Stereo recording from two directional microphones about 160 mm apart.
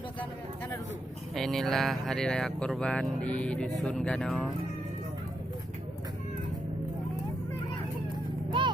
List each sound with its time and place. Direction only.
1.4 s speech: centre (ahead or behind)
8.4 s vehicle: 30° right (ahead or behind)